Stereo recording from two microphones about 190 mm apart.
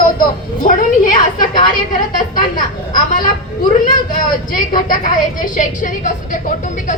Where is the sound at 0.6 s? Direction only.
45° left (ahead or behind).